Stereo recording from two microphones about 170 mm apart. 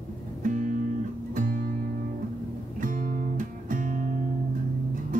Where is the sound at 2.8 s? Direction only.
50° right (ahead or behind).